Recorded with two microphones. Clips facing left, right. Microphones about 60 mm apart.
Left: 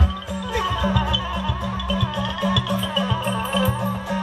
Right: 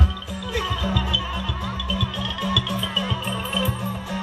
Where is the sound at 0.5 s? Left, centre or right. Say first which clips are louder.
Left 3 dB; left.